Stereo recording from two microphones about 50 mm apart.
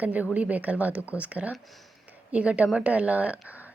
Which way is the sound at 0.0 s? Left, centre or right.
Right.